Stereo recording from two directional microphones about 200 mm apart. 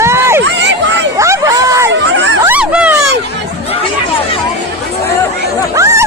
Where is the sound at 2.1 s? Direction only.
60° right (ahead or behind).